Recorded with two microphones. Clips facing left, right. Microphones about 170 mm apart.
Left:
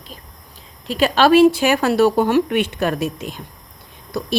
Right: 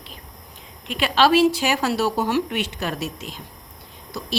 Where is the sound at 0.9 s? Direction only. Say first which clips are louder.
Left 4 dB; 40° left (ahead or behind).